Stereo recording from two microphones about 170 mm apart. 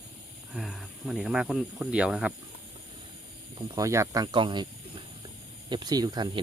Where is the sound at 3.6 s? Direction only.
25° right (ahead or behind).